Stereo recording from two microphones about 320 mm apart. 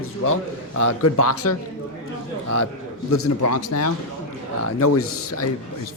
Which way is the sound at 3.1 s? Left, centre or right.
Left.